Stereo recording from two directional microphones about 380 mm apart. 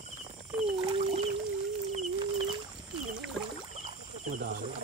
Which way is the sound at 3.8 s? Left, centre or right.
Centre.